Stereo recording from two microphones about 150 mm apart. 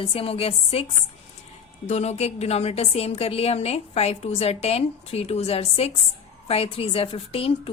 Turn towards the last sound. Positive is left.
turn(degrees=40)  # may be behind; listen again after turning